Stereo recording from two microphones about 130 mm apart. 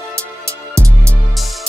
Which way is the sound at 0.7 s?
20° right (ahead or behind).